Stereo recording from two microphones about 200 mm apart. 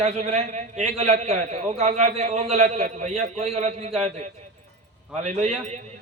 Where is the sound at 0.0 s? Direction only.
35° right (ahead or behind).